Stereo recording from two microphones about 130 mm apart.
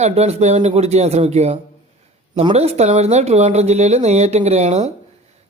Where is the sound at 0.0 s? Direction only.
50° right (ahead or behind).